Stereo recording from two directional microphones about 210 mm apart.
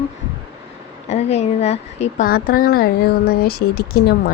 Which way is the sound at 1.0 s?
30° left (ahead or behind).